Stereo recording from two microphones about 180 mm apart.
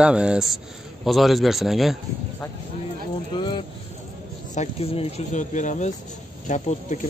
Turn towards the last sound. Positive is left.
turn(degrees=45)  # may be behind; listen again after turning